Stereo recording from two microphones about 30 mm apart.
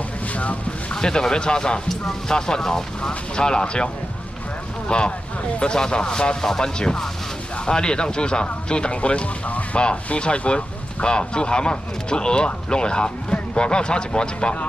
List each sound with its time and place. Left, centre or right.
0.9 s speech: left